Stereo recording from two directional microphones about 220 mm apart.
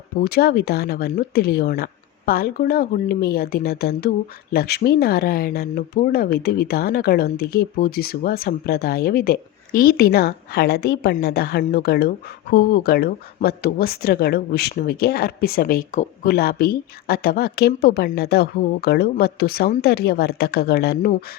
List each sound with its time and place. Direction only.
0.2 s speech: 45° left (ahead or behind)